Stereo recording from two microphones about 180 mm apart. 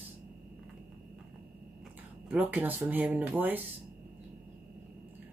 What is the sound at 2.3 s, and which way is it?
Speech, 10° right (ahead or behind).